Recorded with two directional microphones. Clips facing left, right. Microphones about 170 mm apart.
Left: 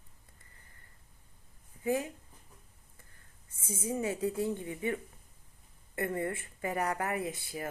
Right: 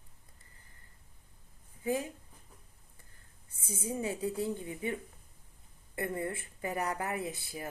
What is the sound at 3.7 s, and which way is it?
Speech, 30° left (ahead or behind).